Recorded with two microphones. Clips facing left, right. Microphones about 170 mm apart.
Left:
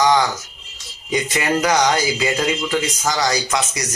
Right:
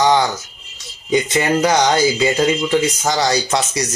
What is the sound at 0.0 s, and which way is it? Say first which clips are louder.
Music: right 1 dB; 25° right (ahead or behind).